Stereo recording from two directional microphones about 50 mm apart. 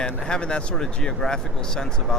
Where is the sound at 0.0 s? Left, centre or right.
Centre.